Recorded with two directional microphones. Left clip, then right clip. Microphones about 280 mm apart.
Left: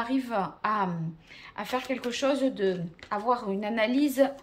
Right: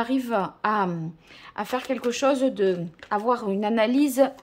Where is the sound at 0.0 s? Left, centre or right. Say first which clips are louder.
Right 4 dB; right.